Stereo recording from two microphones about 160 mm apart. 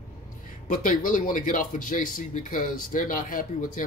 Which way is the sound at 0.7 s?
55° left (ahead or behind).